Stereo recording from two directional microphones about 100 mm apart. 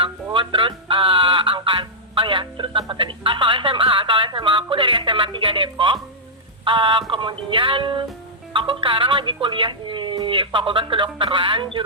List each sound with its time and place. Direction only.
0.3 s music: 55° right (ahead or behind)
2.9 s speech: 55° right (ahead or behind)